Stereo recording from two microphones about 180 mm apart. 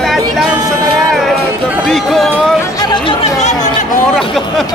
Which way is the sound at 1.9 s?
Centre (ahead or behind).